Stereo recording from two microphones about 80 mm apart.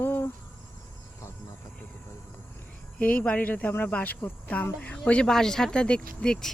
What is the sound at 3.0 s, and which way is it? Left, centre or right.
Speech, centre.